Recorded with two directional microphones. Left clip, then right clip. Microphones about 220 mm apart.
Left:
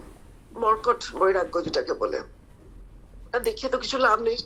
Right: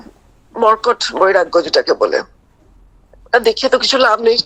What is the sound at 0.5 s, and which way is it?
A woman's voice, 45° right (ahead or behind).